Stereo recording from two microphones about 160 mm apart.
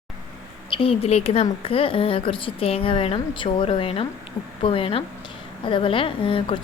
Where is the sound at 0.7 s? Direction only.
35° left (ahead or behind).